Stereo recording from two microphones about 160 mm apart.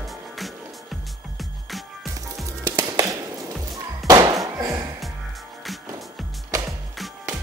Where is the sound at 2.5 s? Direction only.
20° right (ahead or behind).